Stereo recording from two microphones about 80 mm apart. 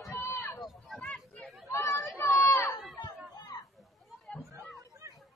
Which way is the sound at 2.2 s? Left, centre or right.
Left.